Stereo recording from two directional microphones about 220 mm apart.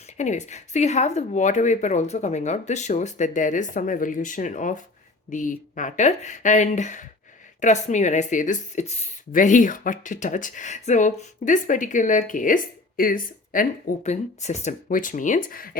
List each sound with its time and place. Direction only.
0.2 s speech: 30° left (ahead or behind)